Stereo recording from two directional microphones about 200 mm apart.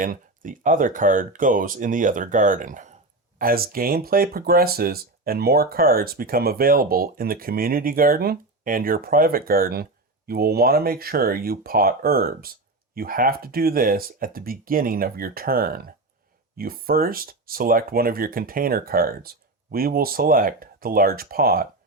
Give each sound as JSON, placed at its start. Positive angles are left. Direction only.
{"t": 0.0, "sound": "speech", "side_deg": -40}